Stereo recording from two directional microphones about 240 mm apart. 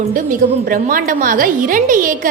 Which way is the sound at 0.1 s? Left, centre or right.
Right.